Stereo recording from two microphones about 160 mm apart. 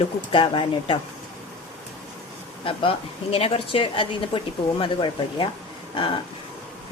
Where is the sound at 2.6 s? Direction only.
35° left (ahead or behind).